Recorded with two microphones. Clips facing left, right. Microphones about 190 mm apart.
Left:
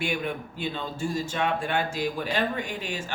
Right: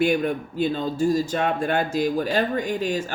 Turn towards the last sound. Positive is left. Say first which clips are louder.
# right 9 dB
turn(degrees=-40)  # may be behind; listen again after turning